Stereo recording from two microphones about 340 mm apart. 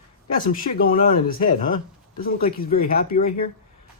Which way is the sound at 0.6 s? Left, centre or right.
Left.